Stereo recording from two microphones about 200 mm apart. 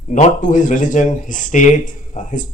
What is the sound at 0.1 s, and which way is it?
A man's voice, 40° left (ahead or behind).